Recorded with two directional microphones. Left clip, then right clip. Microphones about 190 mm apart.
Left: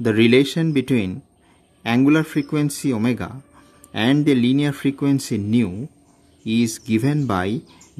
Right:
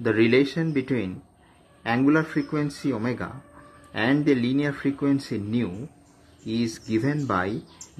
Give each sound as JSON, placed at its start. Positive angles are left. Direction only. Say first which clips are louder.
{"t": 0.0, "sound": "speech", "louder": "left 4 dB", "side_deg": 90}